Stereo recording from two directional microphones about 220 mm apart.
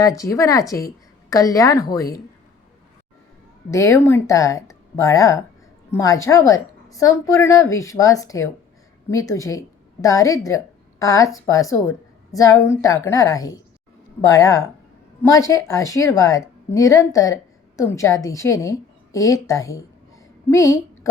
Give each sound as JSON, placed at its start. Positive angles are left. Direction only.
{"t": 0.0, "sound": "speech", "side_deg": 15}
{"t": 3.7, "sound": "a woman's voice", "side_deg": 15}